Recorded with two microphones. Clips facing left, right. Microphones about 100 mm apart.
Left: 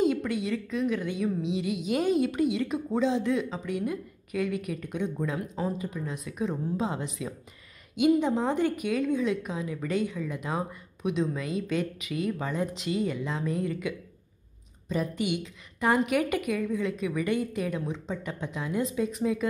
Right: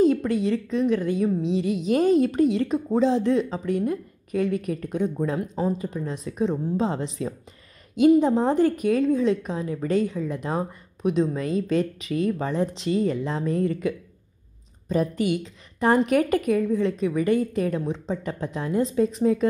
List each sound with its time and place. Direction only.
0.0 s a woman's voice: 35° right (ahead or behind)